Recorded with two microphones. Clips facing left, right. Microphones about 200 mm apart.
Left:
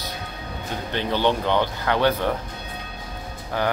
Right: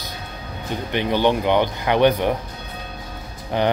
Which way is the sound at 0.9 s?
15° right (ahead or behind).